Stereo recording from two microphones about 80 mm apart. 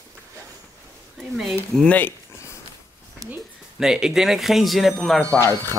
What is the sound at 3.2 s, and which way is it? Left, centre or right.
Speech, right.